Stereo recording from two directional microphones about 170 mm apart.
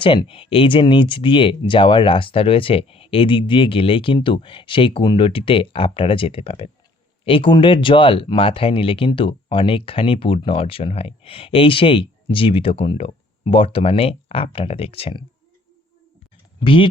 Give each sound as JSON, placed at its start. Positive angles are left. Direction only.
{"t": 0.0, "sound": "speech", "side_deg": 30}
{"t": 16.6, "sound": "speech", "side_deg": 30}